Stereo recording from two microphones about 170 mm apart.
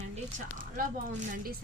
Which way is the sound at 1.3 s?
60° right (ahead or behind).